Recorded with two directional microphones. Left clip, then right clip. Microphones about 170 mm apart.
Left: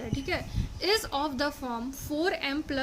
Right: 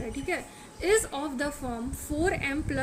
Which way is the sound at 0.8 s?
55° left (ahead or behind).